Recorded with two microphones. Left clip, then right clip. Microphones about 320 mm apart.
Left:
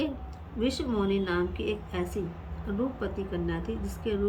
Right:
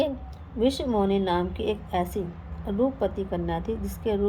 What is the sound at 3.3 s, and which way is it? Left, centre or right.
Speech, right.